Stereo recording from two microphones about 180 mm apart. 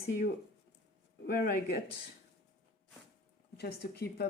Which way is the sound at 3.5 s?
65° left (ahead or behind).